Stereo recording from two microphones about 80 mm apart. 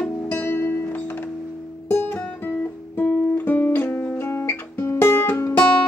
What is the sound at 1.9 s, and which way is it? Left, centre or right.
Guitar, left.